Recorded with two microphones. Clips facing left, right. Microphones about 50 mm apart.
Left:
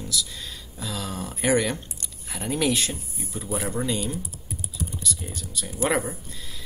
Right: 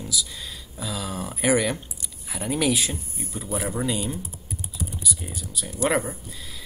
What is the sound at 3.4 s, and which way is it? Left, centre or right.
Speech, centre.